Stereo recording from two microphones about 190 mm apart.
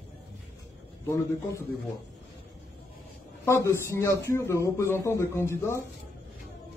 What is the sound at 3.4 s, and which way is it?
Speech, 15° left (ahead or behind).